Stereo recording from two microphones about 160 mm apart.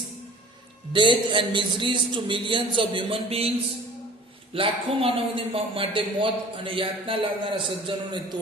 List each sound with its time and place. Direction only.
0.9 s a man's voice: 30° right (ahead or behind)
4.5 s a man's voice: 35° right (ahead or behind)